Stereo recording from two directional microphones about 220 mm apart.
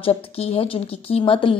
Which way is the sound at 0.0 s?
25° left (ahead or behind).